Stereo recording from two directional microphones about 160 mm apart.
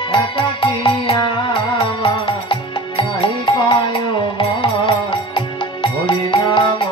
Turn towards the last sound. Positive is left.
turn(degrees=30)  # may be behind; listen again after turning